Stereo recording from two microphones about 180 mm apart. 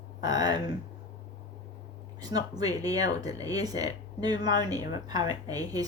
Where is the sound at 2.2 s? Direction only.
20° right (ahead or behind).